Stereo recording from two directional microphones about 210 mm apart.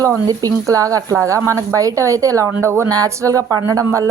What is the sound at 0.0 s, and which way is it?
A woman's voice, 15° right (ahead or behind).